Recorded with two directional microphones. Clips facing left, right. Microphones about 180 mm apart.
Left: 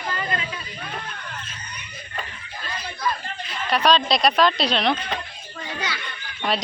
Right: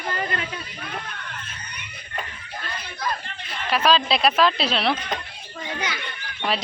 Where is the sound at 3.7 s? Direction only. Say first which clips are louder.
Left 1 dB; 5° right (ahead or behind).